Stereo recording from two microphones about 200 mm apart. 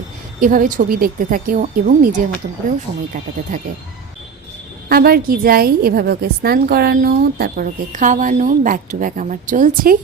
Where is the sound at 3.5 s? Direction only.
40° right (ahead or behind).